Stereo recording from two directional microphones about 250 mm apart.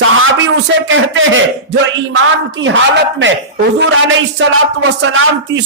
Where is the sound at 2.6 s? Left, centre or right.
Right.